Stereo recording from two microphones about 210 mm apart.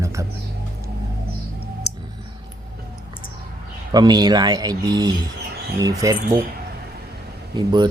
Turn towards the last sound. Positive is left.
turn(degrees=-20)  # may be behind; listen again after turning